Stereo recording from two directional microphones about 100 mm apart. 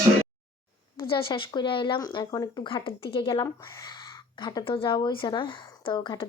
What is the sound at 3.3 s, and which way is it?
Speech, 35° left (ahead or behind).